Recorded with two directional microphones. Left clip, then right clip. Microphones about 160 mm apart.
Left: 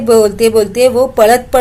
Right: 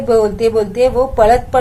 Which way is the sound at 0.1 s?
40° left (ahead or behind).